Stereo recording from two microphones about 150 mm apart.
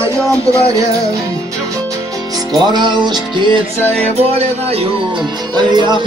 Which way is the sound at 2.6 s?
30° right (ahead or behind).